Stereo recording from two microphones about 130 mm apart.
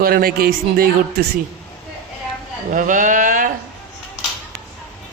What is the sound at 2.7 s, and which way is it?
Speech, 90° right.